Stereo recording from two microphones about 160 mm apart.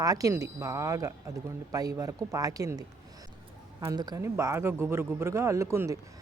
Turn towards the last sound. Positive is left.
turn(degrees=-20)  # may be behind; listen again after turning